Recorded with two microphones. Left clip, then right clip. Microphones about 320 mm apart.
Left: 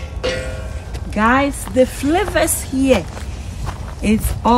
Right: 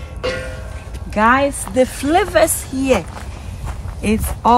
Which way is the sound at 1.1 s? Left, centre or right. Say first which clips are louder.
Right 2 dB; centre.